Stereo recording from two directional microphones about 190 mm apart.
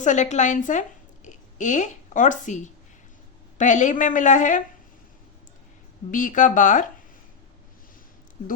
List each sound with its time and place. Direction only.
0.0 s a woman's voice: 40° left (ahead or behind)
3.6 s a woman's voice: 40° left (ahead or behind)
6.1 s speech: 45° left (ahead or behind)